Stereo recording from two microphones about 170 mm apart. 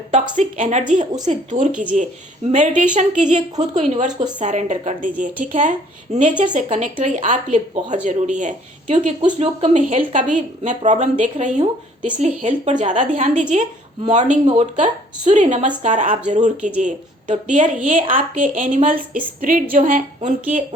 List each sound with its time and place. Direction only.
0.1 s speech: 45° right (ahead or behind)
1.7 s speech: 5° right (ahead or behind)
2.5 s speech: 45° right (ahead or behind)